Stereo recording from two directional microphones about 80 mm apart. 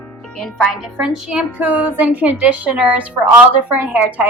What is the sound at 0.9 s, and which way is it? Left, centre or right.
A woman's voice, centre.